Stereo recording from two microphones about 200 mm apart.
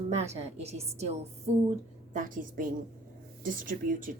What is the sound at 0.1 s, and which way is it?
A woman's voice, 30° right (ahead or behind).